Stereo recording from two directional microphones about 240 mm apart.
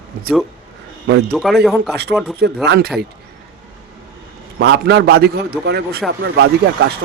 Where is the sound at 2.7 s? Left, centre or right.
Right.